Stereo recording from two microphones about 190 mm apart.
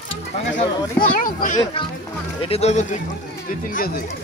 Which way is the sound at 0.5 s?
45° left (ahead or behind).